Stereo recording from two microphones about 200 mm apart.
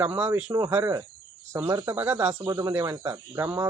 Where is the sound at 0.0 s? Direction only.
10° right (ahead or behind).